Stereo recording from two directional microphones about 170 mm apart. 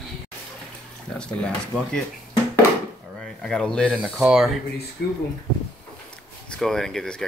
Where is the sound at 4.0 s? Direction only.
5° right (ahead or behind).